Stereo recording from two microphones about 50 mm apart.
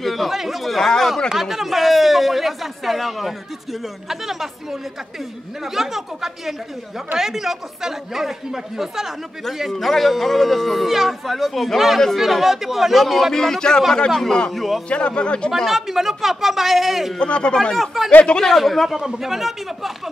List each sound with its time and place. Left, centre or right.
0.0 s speech: centre
5.8 s speech: centre
14.5 s speech: centre
14.9 s speech: left
15.5 s speech: centre
17.2 s speech: centre
17.7 s speech: centre
18.2 s speech: centre
18.5 s speech: centre